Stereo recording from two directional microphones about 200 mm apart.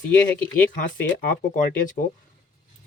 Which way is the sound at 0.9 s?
45° left (ahead or behind).